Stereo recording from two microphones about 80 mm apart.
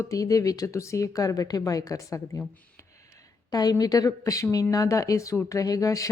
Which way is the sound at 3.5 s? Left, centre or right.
Left.